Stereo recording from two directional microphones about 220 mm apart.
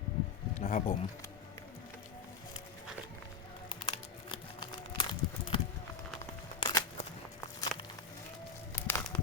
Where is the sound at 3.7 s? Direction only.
25° left (ahead or behind).